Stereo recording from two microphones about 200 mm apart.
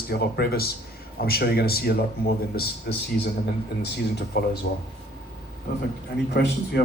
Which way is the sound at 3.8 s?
50° left (ahead or behind).